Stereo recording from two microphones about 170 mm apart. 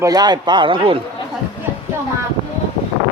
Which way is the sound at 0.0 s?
25° right (ahead or behind).